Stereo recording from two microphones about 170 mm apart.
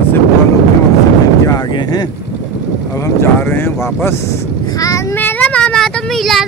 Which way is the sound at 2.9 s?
15° left (ahead or behind).